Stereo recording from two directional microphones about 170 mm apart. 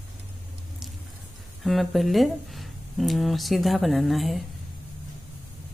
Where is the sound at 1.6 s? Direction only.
Centre (ahead or behind).